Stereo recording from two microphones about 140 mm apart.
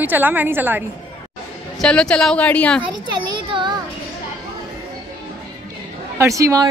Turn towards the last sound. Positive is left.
turn(degrees=-25)  # may be behind; listen again after turning